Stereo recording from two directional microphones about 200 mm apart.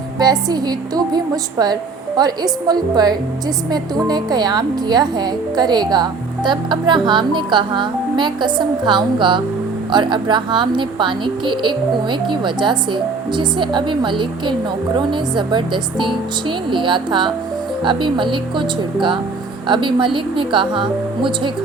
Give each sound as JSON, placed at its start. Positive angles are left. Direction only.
{"t": 0.2, "sound": "a woman's voice", "side_deg": -20}